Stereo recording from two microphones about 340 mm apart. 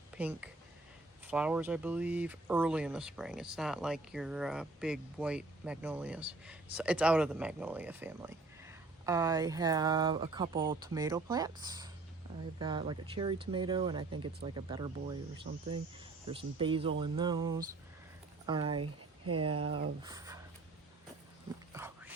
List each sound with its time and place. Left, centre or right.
0.2 s speech: centre
18.8 s speech: right
19.7 s speech: centre
21.7 s a sound: centre